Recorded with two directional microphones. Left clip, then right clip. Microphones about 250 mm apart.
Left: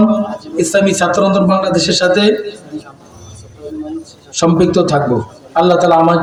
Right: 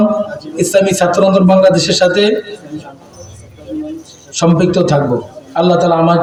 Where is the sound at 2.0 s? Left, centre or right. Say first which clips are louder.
Left 2 dB; left.